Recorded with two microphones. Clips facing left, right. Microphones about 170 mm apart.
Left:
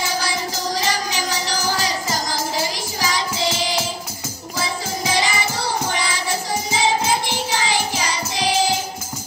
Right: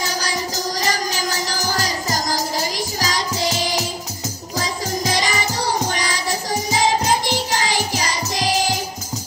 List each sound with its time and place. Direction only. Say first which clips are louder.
0.0 s music: left 1 dB; 40° right (ahead or behind)